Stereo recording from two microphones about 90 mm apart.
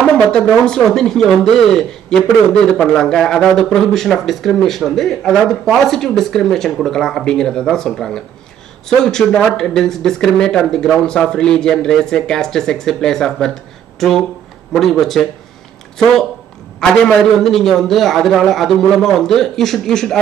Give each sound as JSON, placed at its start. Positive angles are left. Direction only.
{"t": 0.0, "sound": "a man's voice", "side_deg": 10}
{"t": 17.0, "sound": "a man's voice", "side_deg": 5}